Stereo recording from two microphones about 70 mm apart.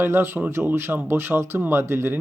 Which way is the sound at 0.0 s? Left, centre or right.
Right.